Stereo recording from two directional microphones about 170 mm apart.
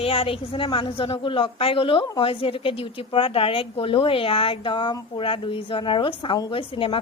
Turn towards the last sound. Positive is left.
turn(degrees=30)  # may be behind; listen again after turning